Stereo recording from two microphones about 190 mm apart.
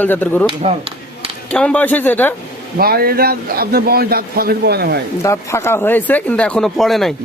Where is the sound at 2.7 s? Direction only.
50° right (ahead or behind).